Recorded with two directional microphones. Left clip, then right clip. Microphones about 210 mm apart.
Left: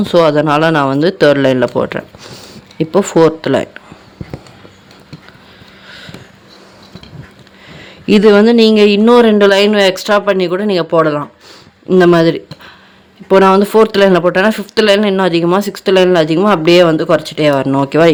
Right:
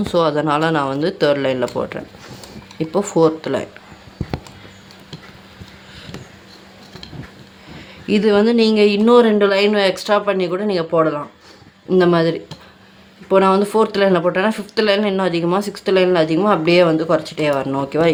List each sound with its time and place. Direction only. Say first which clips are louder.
0.0 s speech: left 7 dB; 35° left (ahead or behind)
7.8 s speech: left 8 dB; 40° left (ahead or behind)